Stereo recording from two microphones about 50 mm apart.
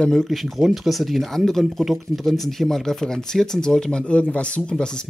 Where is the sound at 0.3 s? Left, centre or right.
Centre.